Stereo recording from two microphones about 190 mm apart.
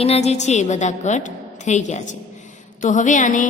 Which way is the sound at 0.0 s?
35° left (ahead or behind).